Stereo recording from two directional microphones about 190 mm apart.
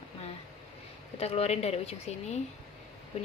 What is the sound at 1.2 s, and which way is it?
A woman's voice, 35° left (ahead or behind).